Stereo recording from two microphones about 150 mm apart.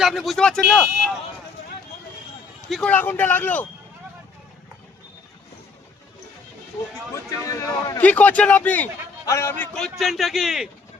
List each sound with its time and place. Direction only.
0.0 s speech: centre (ahead or behind)
2.6 s a man's voice: 5° left (ahead or behind)
7.1 s speech: 20° left (ahead or behind)
8.0 s a man's voice: 10° left (ahead or behind)
10.0 s speech: centre (ahead or behind)